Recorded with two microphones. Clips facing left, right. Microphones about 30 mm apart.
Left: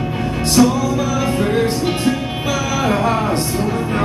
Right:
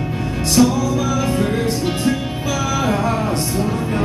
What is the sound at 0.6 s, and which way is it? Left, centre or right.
Music, centre.